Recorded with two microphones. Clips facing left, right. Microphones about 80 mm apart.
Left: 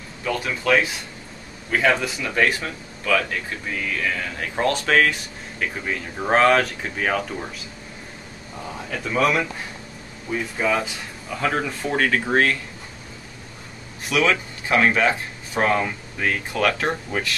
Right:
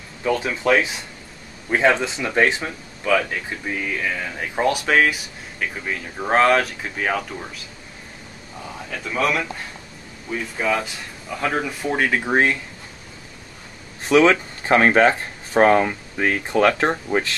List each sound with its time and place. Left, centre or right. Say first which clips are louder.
0.2 s speech: right 4 dB; centre
8.6 s speech: left 2 dB; centre
14.0 s speech: right 6 dB; right